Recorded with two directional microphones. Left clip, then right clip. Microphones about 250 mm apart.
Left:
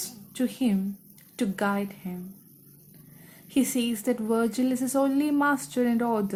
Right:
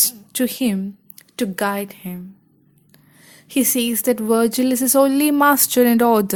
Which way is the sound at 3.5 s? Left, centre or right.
Right.